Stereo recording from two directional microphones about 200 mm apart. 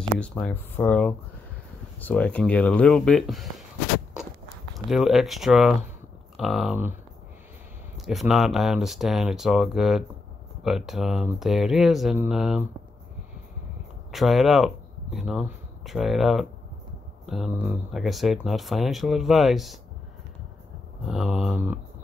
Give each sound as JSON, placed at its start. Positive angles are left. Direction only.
{"t": 0.2, "sound": "speech", "side_deg": 5}
{"t": 4.7, "sound": "speech", "side_deg": 0}
{"t": 8.0, "sound": "speech", "side_deg": 0}
{"t": 14.1, "sound": "speech", "side_deg": 0}
{"t": 21.1, "sound": "speech", "side_deg": 0}